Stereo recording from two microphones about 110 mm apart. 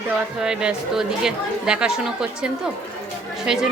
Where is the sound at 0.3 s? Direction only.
5° right (ahead or behind).